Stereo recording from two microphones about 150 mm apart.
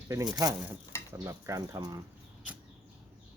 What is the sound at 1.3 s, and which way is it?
Speech, 20° right (ahead or behind).